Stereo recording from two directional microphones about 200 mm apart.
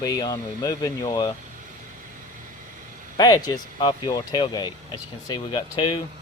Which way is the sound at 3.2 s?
20° left (ahead or behind).